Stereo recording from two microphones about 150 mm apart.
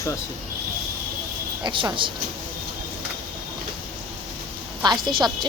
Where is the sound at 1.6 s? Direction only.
30° right (ahead or behind).